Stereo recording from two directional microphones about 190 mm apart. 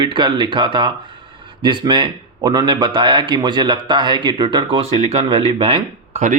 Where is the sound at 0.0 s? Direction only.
25° right (ahead or behind).